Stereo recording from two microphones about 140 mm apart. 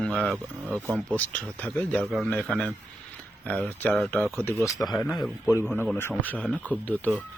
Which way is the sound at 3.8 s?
10° left (ahead or behind).